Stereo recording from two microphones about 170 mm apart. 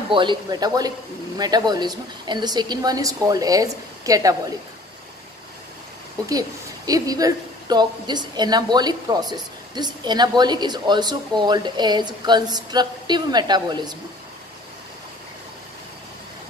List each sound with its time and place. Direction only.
0.1 s a woman's voice: 30° right (ahead or behind)
6.9 s a woman's voice: 20° right (ahead or behind)